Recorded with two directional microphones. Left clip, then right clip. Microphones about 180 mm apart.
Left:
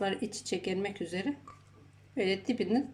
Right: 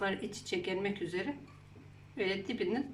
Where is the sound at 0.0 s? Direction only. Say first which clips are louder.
Left 2 dB; 35° left (ahead or behind).